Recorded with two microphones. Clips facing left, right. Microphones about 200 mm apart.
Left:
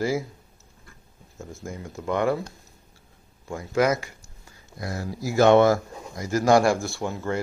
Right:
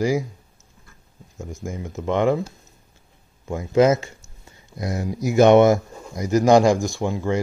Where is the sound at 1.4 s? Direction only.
15° right (ahead or behind).